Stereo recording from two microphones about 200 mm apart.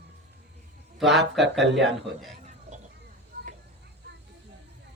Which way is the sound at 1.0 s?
Centre (ahead or behind).